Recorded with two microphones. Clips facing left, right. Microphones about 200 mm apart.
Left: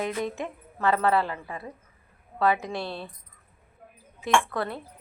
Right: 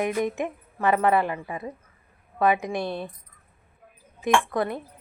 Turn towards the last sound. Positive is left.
turn(degrees=-15)  # may be behind; listen again after turning